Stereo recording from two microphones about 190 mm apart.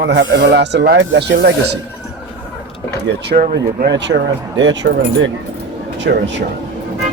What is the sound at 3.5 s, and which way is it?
Speech, 65° right (ahead or behind).